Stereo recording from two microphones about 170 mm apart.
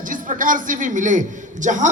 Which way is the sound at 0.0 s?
50° right (ahead or behind).